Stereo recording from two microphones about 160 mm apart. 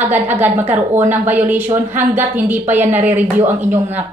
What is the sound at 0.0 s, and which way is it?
A woman's voice, 10° right (ahead or behind).